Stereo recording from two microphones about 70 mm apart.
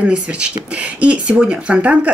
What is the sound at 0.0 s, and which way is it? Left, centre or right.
A man's voice, centre.